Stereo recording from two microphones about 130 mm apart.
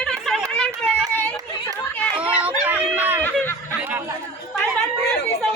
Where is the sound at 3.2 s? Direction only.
15° left (ahead or behind).